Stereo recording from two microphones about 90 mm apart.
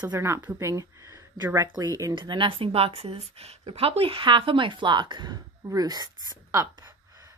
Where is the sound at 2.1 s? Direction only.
60° right (ahead or behind).